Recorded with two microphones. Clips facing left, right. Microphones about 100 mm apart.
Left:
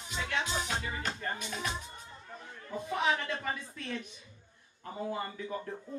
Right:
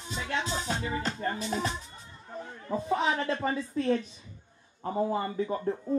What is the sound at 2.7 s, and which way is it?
Speech, 30° right (ahead or behind).